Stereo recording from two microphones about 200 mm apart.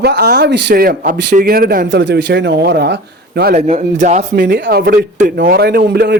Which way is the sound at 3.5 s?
35° right (ahead or behind).